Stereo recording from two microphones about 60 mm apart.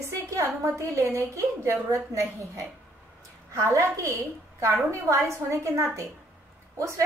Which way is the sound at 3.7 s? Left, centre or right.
Right.